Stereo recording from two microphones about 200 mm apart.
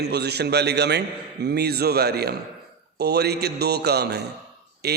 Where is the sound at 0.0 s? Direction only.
55° right (ahead or behind).